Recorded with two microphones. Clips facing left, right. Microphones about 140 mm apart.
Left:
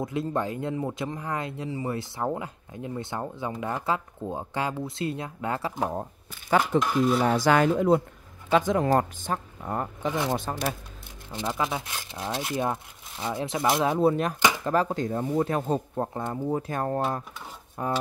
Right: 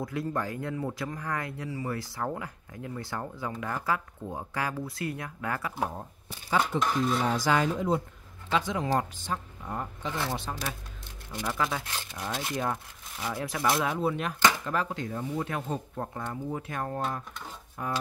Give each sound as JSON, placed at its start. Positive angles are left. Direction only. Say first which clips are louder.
{"t": 0.0, "sound": "speech", "louder": "left 4 dB", "side_deg": 20}
{"t": 6.8, "sound": "cutlery", "louder": "left 4 dB", "side_deg": 5}
{"t": 7.2, "sound": "speech", "louder": "left 5 dB", "side_deg": 60}
{"t": 8.5, "sound": "speech", "louder": "left 6 dB", "side_deg": 50}
{"t": 11.3, "sound": "speech", "louder": "left 2 dB", "side_deg": 20}
{"t": 13.9, "sound": "speech", "louder": "left 7 dB", "side_deg": 40}